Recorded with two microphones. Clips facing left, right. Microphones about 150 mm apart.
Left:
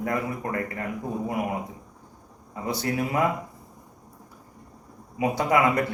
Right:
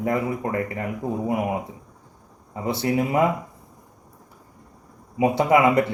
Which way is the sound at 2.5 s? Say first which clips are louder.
Right 5 dB; 25° right (ahead or behind).